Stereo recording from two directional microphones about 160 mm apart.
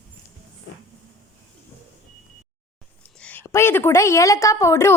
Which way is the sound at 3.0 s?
10° left (ahead or behind).